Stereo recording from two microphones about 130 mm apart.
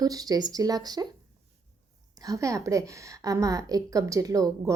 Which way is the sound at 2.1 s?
25° right (ahead or behind).